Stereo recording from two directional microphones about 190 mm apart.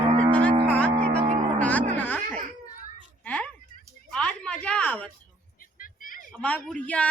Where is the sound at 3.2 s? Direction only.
5° left (ahead or behind).